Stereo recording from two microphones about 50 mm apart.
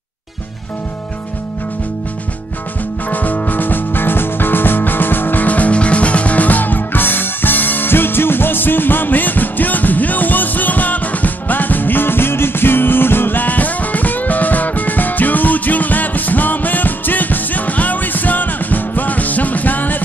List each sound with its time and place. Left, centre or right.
3.1 s music: left